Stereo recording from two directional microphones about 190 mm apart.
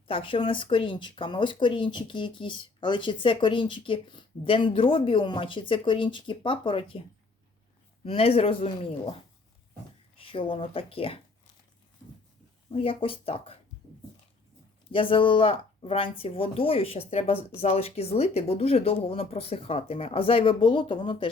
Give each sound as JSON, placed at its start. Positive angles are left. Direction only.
{"t": 0.1, "sound": "speech", "side_deg": 25}
{"t": 8.0, "sound": "speech", "side_deg": 30}
{"t": 10.2, "sound": "speech", "side_deg": 30}
{"t": 12.7, "sound": "speech", "side_deg": 30}
{"t": 14.9, "sound": "speech", "side_deg": 25}